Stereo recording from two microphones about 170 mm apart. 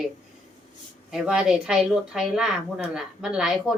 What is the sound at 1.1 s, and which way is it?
A woman's voice, 5° right (ahead or behind).